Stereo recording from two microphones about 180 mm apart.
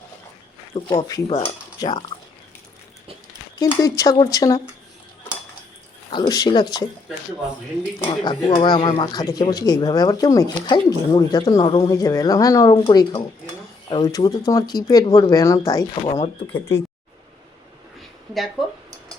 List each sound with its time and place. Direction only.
0.7 s speech: 25° left (ahead or behind)
3.6 s speech: 20° left (ahead or behind)
6.1 s speech: 25° left (ahead or behind)
7.9 s speech: 25° left (ahead or behind)